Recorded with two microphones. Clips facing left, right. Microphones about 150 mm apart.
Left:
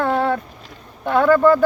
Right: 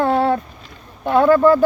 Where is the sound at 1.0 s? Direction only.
15° right (ahead or behind).